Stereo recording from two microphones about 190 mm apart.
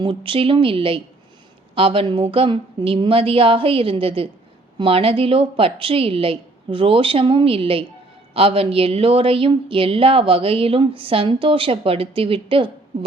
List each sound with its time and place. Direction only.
0.0 s a woman's voice: 25° right (ahead or behind)